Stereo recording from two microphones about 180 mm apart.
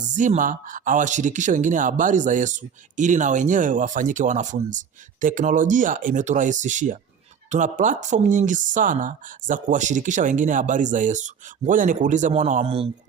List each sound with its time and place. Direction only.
0.0 s speech: 45° right (ahead or behind)